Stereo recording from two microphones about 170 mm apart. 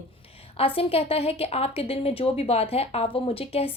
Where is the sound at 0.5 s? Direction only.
35° left (ahead or behind).